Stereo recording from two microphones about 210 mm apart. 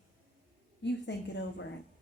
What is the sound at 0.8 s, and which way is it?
Speech, 55° left (ahead or behind).